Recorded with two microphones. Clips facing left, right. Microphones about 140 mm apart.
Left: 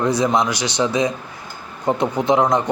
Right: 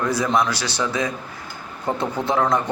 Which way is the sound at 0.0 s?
20° left (ahead or behind).